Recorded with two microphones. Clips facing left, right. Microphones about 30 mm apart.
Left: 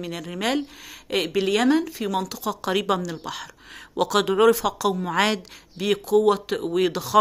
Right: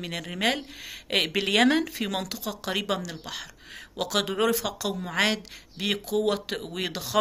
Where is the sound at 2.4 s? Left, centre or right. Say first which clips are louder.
Left 6 dB; centre.